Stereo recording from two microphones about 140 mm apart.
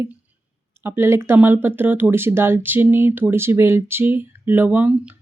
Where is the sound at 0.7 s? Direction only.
15° right (ahead or behind).